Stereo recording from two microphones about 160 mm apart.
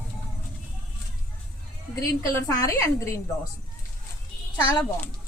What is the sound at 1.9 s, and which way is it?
A woman's voice, 20° left (ahead or behind).